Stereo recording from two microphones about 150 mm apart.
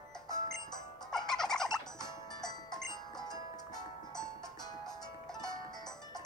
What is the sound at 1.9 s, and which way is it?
Music, 25° left (ahead or behind).